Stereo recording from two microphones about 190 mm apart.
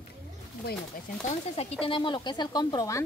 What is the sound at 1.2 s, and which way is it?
Speech, 30° left (ahead or behind).